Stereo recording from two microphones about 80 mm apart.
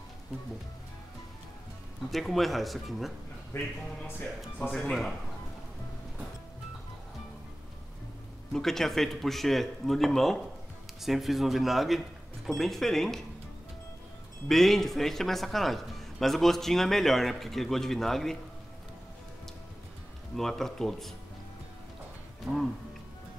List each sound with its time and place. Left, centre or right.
2.0 s a man's voice: centre
3.5 s a man's voice: centre
8.5 s a man's voice: centre
14.5 s a man's voice: centre
20.3 s speech: centre
22.5 s speech: centre